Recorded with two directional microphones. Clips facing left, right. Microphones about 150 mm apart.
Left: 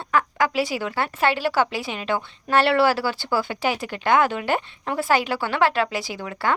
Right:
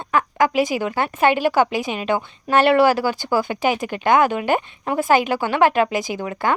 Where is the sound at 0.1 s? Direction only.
20° right (ahead or behind).